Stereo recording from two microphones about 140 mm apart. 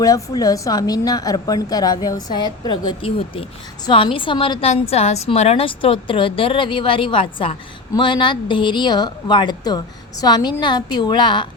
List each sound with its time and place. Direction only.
0.0 s a woman's voice: 25° left (ahead or behind)
4.7 s speech: 50° left (ahead or behind); by 11.4 s 35° left (ahead or behind)